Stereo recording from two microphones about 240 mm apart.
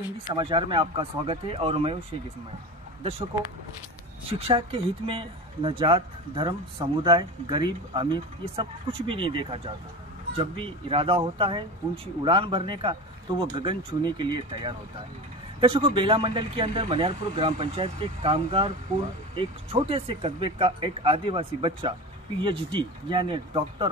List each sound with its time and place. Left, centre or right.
0.3 s speech: right
3.0 s speech: right
4.3 s speech: right